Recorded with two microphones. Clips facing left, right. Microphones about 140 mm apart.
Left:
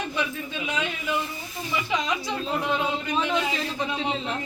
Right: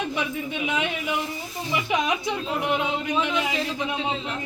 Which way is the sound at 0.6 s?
20° right (ahead or behind).